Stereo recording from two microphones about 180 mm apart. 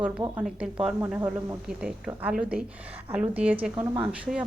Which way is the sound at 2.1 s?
5° right (ahead or behind).